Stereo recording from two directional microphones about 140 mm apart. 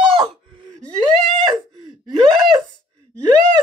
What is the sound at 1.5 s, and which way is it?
Gasp, 35° right (ahead or behind).